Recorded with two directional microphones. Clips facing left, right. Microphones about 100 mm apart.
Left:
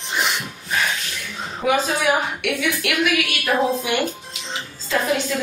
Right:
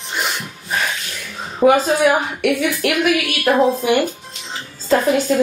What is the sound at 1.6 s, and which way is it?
A woman's voice, 40° right (ahead or behind).